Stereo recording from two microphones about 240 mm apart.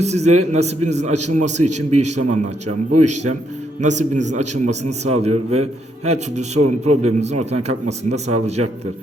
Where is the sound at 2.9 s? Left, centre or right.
Right.